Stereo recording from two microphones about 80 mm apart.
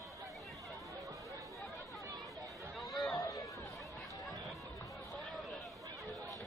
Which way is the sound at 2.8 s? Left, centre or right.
Centre.